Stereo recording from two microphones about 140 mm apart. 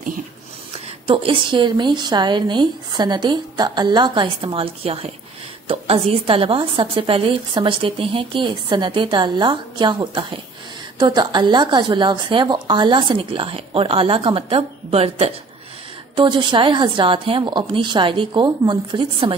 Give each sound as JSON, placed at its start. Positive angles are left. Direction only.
{"t": 0.7, "sound": "a woman's voice", "side_deg": -40}
{"t": 16.2, "sound": "a woman's voice", "side_deg": -35}